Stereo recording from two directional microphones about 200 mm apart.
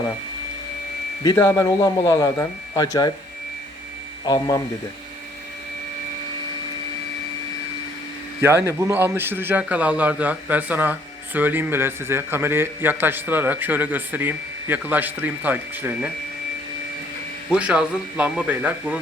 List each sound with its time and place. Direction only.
1.2 s speech: 15° left (ahead or behind)
4.3 s speech: 20° left (ahead or behind)
8.4 s a man's voice: 10° right (ahead or behind)
17.5 s speech: 5° right (ahead or behind)